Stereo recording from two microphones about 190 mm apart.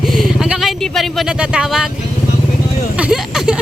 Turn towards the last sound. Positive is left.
turn(degrees=-5)  # may be behind; listen again after turning